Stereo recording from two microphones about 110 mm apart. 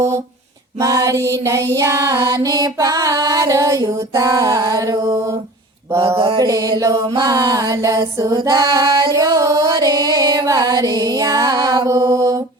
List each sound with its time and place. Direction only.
0.8 s female singing: 30° right (ahead or behind)
2.2 s music: 35° right (ahead or behind)
5.9 s female singing: 25° right (ahead or behind)
6.1 s mantra: 55° right (ahead or behind)
6.4 s mantra: 35° right (ahead or behind)